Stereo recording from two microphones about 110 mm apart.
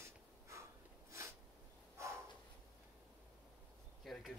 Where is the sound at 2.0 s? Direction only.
25° right (ahead or behind).